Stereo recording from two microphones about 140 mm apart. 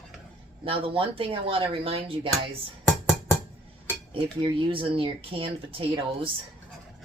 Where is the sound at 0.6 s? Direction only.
40° right (ahead or behind).